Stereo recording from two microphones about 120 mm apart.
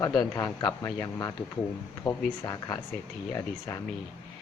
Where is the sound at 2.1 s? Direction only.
25° left (ahead or behind).